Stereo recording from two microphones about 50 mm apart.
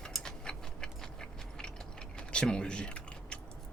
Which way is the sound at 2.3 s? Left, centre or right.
Centre.